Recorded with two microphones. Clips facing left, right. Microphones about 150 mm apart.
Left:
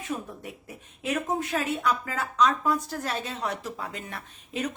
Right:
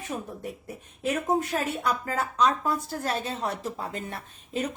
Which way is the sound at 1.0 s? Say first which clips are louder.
Right 3 dB; 35° right (ahead or behind).